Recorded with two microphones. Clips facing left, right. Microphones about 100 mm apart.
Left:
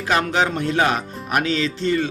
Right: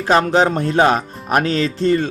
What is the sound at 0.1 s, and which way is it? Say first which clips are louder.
Speech: right 5 dB; 35° right (ahead or behind).